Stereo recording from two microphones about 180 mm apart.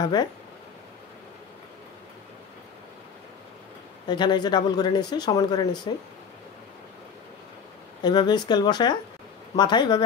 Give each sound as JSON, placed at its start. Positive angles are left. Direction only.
{"t": 0.0, "sound": "speech", "side_deg": 25}
{"t": 4.1, "sound": "speech", "side_deg": 25}
{"t": 8.0, "sound": "speech", "side_deg": 25}